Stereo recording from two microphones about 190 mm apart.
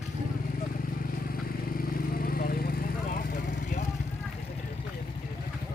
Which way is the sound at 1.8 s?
50° left (ahead or behind).